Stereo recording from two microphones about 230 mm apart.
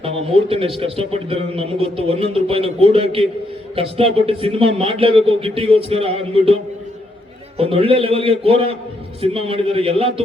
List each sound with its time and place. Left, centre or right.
0.0 s a man's voice: right
7.6 s a man's voice: right